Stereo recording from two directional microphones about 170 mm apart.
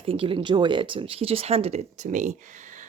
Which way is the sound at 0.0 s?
35° right (ahead or behind).